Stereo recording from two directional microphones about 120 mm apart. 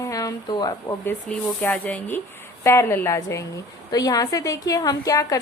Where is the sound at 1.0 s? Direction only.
15° left (ahead or behind).